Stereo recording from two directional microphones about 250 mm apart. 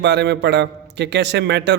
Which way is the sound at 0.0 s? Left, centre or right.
Right.